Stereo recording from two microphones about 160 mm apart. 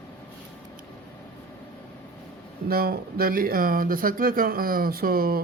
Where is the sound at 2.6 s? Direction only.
70° right (ahead or behind).